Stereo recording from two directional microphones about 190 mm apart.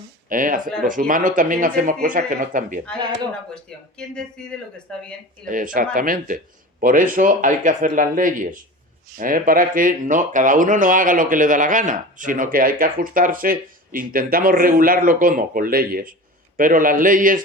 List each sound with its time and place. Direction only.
0.3 s speech: 45° right (ahead or behind)
3.5 s speech: 5° left (ahead or behind)
5.5 s speech: 45° right (ahead or behind)